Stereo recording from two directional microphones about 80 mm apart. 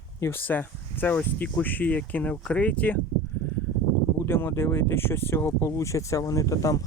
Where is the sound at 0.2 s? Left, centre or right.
Left.